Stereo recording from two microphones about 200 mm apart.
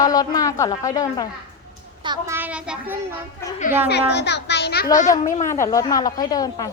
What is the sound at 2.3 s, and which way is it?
Speech, 5° right (ahead or behind).